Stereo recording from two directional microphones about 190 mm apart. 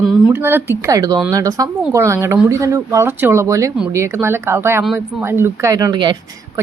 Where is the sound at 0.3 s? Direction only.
10° right (ahead or behind).